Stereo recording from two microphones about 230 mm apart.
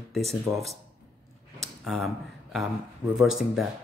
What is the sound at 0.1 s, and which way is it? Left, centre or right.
Speech, centre.